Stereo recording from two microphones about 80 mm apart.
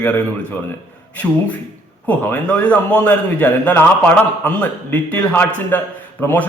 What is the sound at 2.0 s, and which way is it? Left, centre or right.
A man's voice, left.